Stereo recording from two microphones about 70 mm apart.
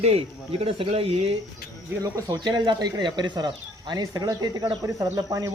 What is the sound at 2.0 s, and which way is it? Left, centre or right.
Speech, right.